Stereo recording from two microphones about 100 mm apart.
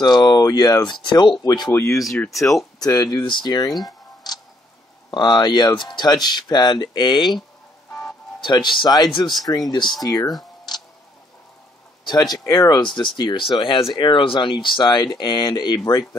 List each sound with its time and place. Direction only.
0.0 s speech: 45° left (ahead or behind)
1.7 s speech: 30° left (ahead or behind)
2.3 s speech: centre (ahead or behind)
2.8 s speech: 40° left (ahead or behind)
4.2 s tick-tock: 40° left (ahead or behind)
5.1 s speech: 50° left (ahead or behind)
8.4 s speech: 50° left (ahead or behind)
12.0 s speech: 45° left (ahead or behind)
15.8 s speech: 35° left (ahead or behind)